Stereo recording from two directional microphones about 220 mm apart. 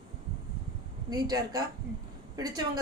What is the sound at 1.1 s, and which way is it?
A woman's voice, 15° right (ahead or behind).